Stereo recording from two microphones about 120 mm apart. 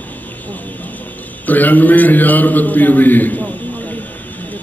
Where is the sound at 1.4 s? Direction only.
15° left (ahead or behind).